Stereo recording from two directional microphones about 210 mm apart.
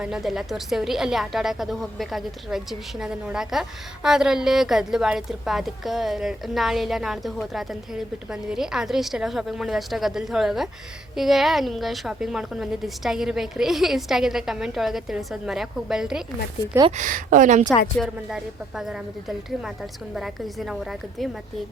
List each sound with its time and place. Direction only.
0.0 s a woman's voice: centre (ahead or behind)
16.9 s speech: 40° right (ahead or behind)
17.9 s a woman's voice: centre (ahead or behind)